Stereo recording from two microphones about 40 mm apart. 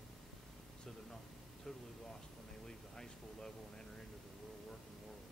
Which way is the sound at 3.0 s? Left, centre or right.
Centre.